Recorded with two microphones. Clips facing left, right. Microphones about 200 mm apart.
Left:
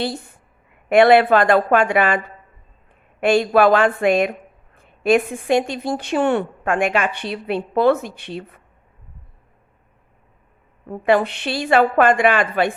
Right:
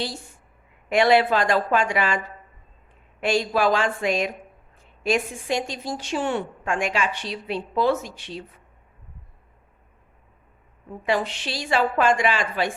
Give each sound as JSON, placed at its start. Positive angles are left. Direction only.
{"t": 0.0, "sound": "a woman's voice", "side_deg": 60}
{"t": 10.8, "sound": "a woman's voice", "side_deg": 60}